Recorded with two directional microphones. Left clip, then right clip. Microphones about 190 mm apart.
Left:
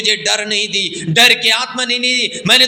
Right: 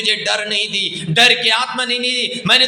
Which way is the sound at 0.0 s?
20° left (ahead or behind).